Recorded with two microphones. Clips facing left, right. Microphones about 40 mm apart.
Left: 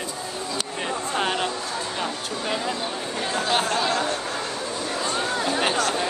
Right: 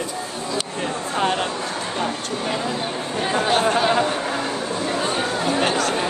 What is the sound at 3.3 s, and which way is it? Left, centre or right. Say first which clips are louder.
Speech: right 5 dB; right.